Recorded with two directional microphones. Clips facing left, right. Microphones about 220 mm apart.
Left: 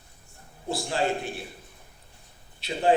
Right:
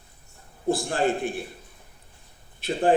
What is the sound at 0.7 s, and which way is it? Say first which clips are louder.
Speech: right 3 dB; 50° right (ahead or behind).